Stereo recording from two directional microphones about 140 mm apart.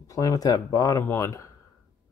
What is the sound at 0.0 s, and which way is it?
Speech, 25° left (ahead or behind).